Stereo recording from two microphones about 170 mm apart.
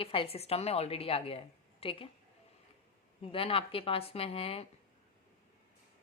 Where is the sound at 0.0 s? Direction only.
35° left (ahead or behind).